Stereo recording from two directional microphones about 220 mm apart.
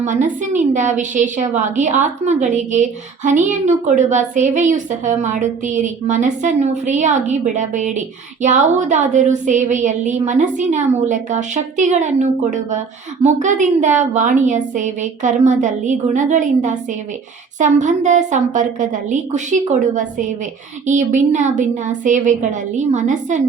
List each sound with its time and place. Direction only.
0.0 s a woman's voice: 35° right (ahead or behind)